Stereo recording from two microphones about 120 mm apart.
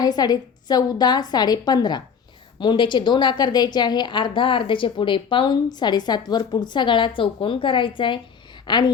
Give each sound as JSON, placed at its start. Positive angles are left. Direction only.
{"t": 0.0, "sound": "a woman's voice", "side_deg": 35}